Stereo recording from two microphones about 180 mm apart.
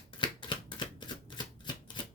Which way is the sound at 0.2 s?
25° left (ahead or behind).